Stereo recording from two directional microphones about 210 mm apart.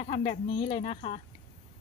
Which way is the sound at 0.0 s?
25° left (ahead or behind).